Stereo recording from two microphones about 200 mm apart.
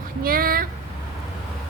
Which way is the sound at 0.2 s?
45° right (ahead or behind).